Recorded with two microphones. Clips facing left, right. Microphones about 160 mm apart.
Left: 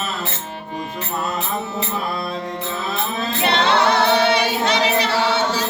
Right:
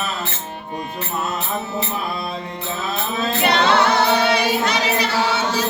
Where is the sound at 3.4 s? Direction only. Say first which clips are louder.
Even; 30° left (ahead or behind).